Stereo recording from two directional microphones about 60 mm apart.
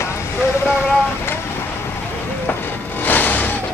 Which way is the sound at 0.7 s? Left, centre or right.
Left.